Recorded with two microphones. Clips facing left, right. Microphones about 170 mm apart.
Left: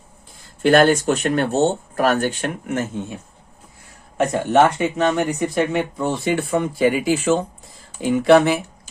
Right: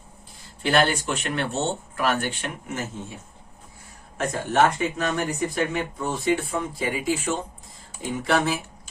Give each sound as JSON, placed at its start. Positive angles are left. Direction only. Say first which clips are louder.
{"t": 0.6, "sound": "speech", "louder": "left 8 dB", "side_deg": 50}
{"t": 4.5, "sound": "speech", "louder": "left 5 dB", "side_deg": 80}